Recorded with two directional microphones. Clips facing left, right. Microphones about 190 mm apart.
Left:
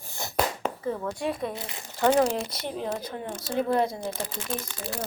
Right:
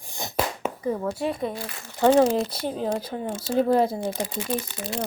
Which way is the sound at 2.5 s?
30° right (ahead or behind).